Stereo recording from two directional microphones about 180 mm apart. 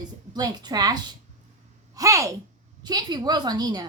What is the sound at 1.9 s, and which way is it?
A woman's voice, 20° right (ahead or behind).